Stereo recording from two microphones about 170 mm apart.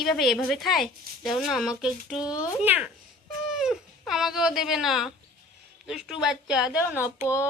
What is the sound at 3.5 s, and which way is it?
Dog, centre (ahead or behind).